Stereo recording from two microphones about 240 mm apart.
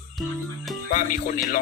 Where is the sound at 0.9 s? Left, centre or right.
Left.